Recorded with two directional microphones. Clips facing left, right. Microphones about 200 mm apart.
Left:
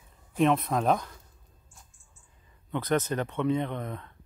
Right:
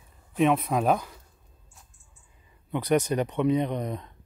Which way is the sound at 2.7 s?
15° right (ahead or behind).